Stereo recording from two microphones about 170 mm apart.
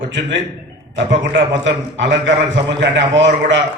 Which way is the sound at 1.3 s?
90° right.